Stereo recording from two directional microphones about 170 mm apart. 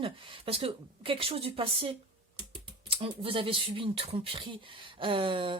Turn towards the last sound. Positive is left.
turn(degrees=-30)  # may be behind; listen again after turning